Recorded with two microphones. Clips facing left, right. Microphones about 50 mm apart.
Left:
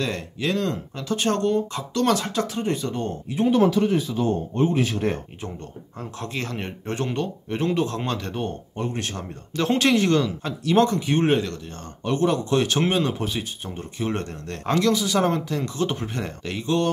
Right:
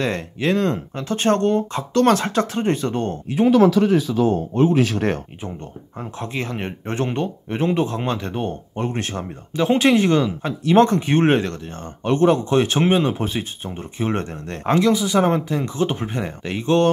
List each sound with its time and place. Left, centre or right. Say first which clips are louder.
0.0 s speech: right 4 dB; right
3.8 s speech: right 5 dB; right
5.9 s speech: right 3 dB; right
8.7 s speech: right 4 dB; right
9.6 s speech: right 4 dB; centre
16.5 s speech: right 6 dB; right